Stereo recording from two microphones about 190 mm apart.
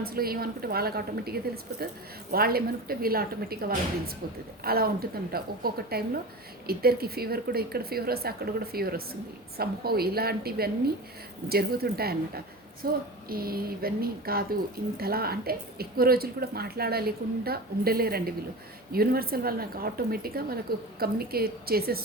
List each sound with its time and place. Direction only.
0.0 s a woman's voice: 50° right (ahead or behind)